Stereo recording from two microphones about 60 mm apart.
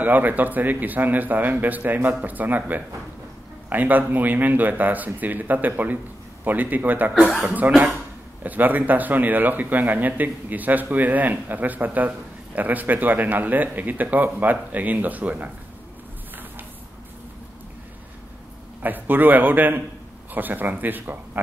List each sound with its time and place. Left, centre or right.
0.0 s a man's voice: right
18.8 s a man's voice: right